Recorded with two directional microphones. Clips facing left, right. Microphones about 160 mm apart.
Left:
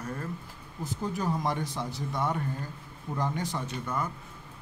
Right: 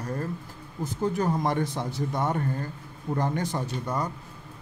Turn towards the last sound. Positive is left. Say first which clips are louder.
# right 3 dB
turn(degrees=-35)  # may be behind; listen again after turning